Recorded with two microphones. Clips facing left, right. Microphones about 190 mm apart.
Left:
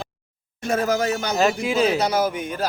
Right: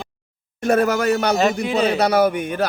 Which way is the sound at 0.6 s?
65° right (ahead or behind).